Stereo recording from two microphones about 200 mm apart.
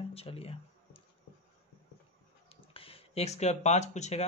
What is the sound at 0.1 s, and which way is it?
Speech, 30° left (ahead or behind).